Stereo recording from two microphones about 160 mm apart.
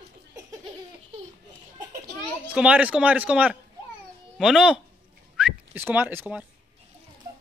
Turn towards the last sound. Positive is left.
turn(degrees=-10)  # may be behind; listen again after turning